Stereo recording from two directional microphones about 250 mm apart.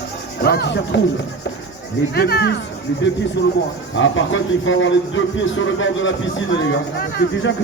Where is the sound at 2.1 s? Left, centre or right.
Left.